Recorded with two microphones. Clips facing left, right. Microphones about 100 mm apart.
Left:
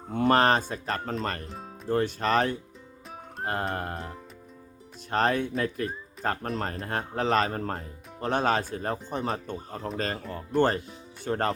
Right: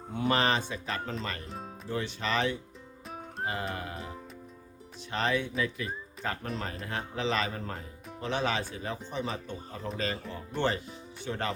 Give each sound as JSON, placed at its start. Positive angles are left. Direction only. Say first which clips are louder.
{"t": 0.1, "sound": "speech", "louder": "left 6 dB", "side_deg": 50}
{"t": 1.5, "sound": "music", "louder": "even", "side_deg": 0}
{"t": 1.9, "sound": "speech", "louder": "left 7 dB", "side_deg": 45}
{"t": 3.9, "sound": "music", "louder": "left 3 dB", "side_deg": 0}
{"t": 5.1, "sound": "speech", "louder": "left 4 dB", "side_deg": 45}